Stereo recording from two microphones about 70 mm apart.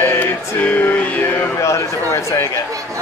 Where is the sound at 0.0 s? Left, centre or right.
Left.